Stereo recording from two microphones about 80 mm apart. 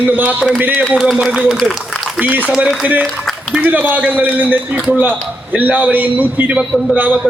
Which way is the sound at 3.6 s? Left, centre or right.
Right.